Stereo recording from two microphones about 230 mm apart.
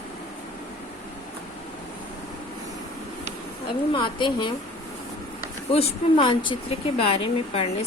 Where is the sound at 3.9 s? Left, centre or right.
Left.